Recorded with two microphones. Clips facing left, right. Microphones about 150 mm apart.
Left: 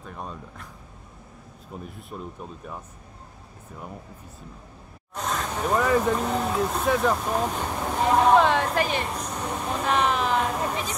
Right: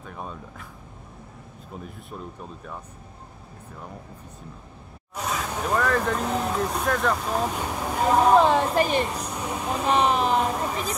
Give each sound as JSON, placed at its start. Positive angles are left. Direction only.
{"t": 0.0, "sound": "speech", "side_deg": 0}
{"t": 1.8, "sound": "speech", "side_deg": 0}
{"t": 5.1, "sound": "vehicle", "side_deg": -5}
{"t": 5.6, "sound": "speech", "side_deg": 5}